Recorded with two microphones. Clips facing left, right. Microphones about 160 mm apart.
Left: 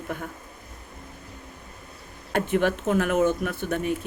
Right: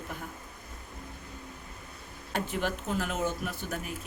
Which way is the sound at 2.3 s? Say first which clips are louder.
Left 9 dB; 60° left (ahead or behind).